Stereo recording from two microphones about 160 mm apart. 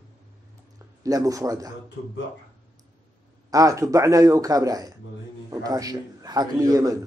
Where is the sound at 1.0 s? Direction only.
20° right (ahead or behind).